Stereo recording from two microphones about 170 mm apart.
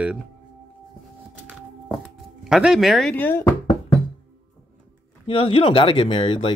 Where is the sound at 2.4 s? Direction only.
5° right (ahead or behind); by 4.0 s 20° left (ahead or behind).